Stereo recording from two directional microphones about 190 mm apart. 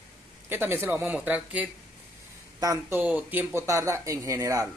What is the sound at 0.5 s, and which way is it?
Speech, 10° right (ahead or behind).